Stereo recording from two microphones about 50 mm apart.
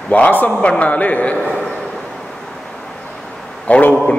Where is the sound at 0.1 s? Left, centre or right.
Left.